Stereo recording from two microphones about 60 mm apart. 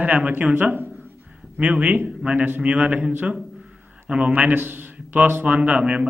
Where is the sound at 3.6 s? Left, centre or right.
Centre.